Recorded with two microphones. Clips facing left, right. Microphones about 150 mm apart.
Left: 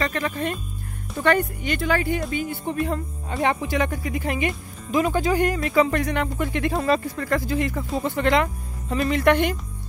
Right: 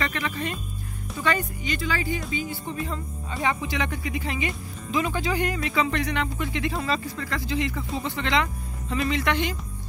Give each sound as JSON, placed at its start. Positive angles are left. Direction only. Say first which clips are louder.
{"t": 0.0, "sound": "speech", "louder": "left 4 dB", "side_deg": 45}
{"t": 3.4, "sound": "speech", "louder": "left 4 dB", "side_deg": 45}